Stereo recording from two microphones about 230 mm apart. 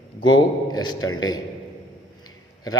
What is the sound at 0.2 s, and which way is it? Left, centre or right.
A man's voice, centre.